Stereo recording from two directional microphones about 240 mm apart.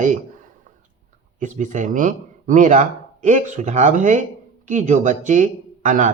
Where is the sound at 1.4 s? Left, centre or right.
Right.